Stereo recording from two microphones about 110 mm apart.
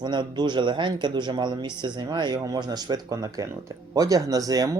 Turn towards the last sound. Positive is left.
turn(degrees=-35)  # may be behind; listen again after turning